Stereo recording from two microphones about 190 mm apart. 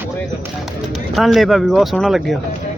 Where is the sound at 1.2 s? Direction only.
Centre (ahead or behind).